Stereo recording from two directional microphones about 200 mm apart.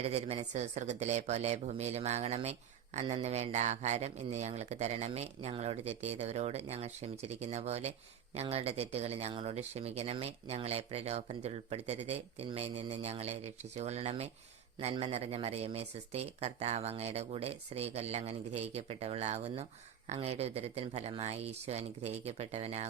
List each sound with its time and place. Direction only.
0.0 s speech: 30° right (ahead or behind)